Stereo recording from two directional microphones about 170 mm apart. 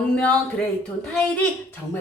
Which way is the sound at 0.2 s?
5° left (ahead or behind).